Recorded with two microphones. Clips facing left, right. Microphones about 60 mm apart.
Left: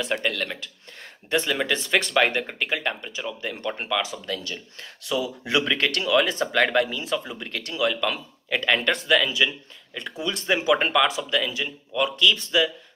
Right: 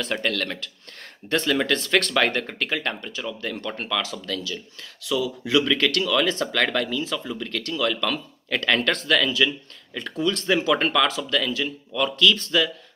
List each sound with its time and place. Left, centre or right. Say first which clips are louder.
0.0 s speech: even; centre